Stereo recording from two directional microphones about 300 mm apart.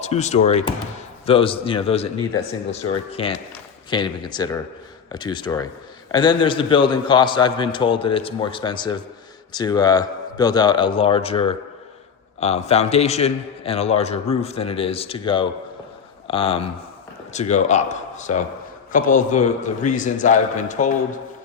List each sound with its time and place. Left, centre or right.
0.0 s a man's voice: left
3.1 s a man's voice: centre